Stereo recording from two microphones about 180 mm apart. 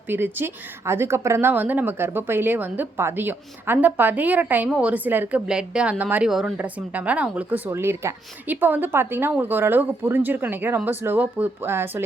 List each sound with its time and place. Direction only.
0.1 s speech: 10° right (ahead or behind)